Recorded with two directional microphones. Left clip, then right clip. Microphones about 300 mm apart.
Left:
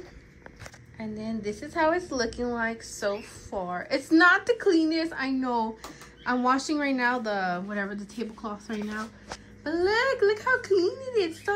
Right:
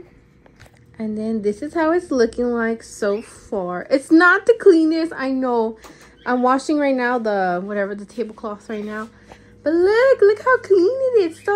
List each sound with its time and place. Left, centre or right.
1.2 s speech: centre
3.5 s a woman's voice: right
3.8 s speech: centre